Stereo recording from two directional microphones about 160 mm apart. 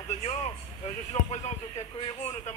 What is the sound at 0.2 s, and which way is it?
Vehicle, 45° left (ahead or behind).